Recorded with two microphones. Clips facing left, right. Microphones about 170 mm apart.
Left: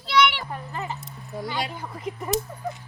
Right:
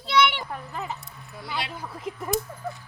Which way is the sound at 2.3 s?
20° left (ahead or behind).